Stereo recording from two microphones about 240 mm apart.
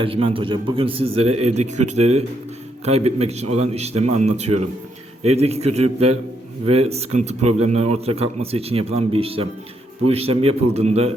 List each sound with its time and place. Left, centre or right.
0.0 s speech: right